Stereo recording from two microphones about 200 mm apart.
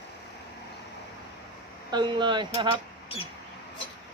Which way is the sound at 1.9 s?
20° right (ahead or behind).